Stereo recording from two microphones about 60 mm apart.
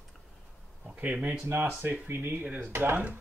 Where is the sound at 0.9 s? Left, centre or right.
Right.